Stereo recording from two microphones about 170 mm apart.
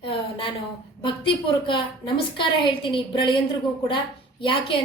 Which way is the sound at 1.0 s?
30° left (ahead or behind).